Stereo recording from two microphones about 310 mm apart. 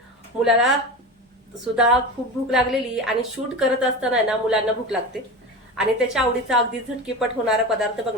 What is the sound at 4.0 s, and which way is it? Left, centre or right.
A woman's voice, centre.